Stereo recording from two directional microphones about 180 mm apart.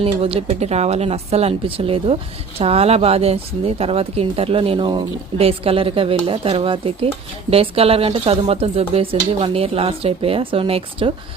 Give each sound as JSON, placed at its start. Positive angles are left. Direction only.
{"t": 0.0, "sound": "a woman's voice", "side_deg": -30}